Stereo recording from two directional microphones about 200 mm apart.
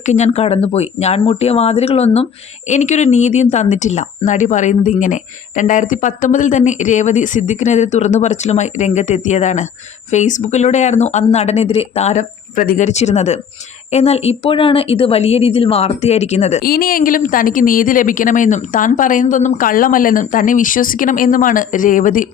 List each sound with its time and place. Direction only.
0.0 s speech: 35° left (ahead or behind)
16.6 s speech: 45° left (ahead or behind)